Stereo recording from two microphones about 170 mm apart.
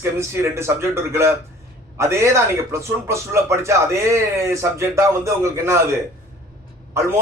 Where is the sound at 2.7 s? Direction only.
15° right (ahead or behind).